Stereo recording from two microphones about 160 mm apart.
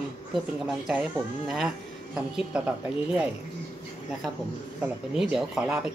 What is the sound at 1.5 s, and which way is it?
Speech, centre (ahead or behind).